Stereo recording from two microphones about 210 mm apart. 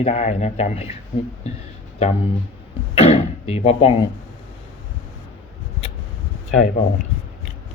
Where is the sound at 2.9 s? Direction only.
30° left (ahead or behind).